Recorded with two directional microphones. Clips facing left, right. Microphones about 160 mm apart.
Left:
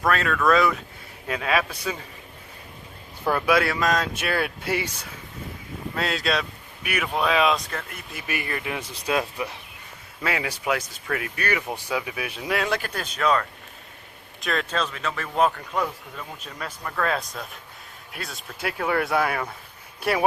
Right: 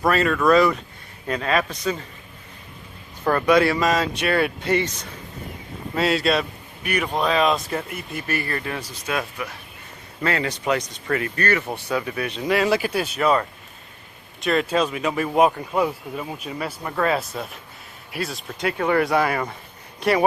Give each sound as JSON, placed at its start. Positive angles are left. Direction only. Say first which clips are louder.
{"t": 0.0, "sound": "a man's voice", "louder": "right 3 dB", "side_deg": -5}
{"t": 3.2, "sound": "speech", "louder": "right 4 dB", "side_deg": 5}
{"t": 5.9, "sound": "speech", "louder": "right 5 dB", "side_deg": 0}
{"t": 7.7, "sound": "speech", "louder": "right 7 dB", "side_deg": -10}
{"t": 8.4, "sound": "a man's voice", "louder": "right 2 dB", "side_deg": 15}
{"t": 8.8, "sound": "speech", "louder": "left 2 dB", "side_deg": 30}
{"t": 10.2, "sound": "speech", "louder": "right 4 dB", "side_deg": 5}
{"t": 14.4, "sound": "speech", "louder": "right 6 dB", "side_deg": -5}